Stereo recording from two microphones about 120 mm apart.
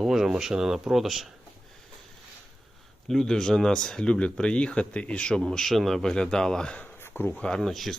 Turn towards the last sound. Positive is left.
turn(degrees=0)  # may be behind; listen again after turning